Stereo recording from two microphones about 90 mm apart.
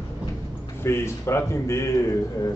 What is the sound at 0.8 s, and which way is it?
A man's voice, 30° left (ahead or behind).